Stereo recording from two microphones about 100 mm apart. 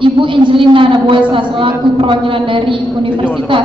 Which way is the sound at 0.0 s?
55° right (ahead or behind).